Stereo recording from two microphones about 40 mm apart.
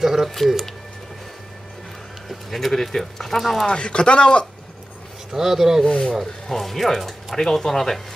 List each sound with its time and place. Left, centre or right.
0.0 s speech: centre
0.3 s speech: centre
2.2 s speech: centre
3.6 s speech: left
5.3 s speech: centre
5.9 s speech: left
6.4 s speech: centre